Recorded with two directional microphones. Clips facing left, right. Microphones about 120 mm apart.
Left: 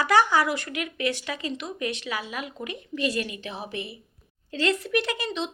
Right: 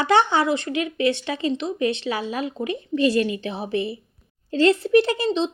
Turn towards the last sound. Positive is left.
turn(degrees=-30)  # may be behind; listen again after turning